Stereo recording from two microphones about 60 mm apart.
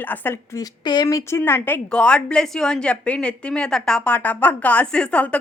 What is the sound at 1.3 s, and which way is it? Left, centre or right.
Speech, left.